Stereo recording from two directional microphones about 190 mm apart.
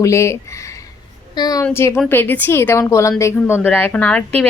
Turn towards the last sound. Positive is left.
turn(degrees=5)  # may be behind; listen again after turning